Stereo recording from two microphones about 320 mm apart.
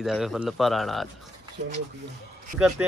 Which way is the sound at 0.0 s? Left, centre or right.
Centre.